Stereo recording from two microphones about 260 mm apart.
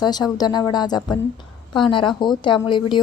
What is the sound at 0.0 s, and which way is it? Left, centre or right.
A woman's voice, centre.